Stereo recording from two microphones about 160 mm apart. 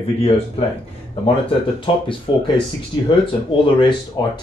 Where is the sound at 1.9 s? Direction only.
35° left (ahead or behind).